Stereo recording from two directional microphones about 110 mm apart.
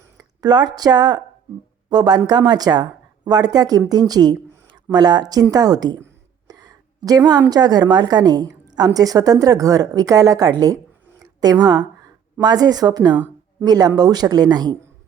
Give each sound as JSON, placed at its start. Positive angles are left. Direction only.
{"t": 0.2, "sound": "a woman's voice", "side_deg": -40}
{"t": 6.5, "sound": "a sound", "side_deg": -35}
{"t": 7.5, "sound": "a woman's voice", "side_deg": -40}